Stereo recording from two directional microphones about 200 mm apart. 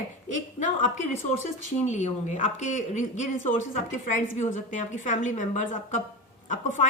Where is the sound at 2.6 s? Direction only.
35° left (ahead or behind).